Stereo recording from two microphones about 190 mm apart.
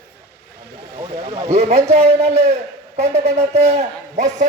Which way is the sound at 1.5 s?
35° right (ahead or behind).